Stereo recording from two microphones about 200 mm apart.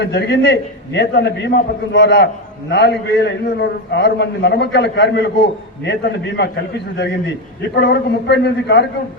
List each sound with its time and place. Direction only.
0.0 s a man's voice: 55° left (ahead or behind)